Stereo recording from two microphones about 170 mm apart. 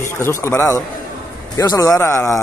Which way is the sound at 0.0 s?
15° left (ahead or behind).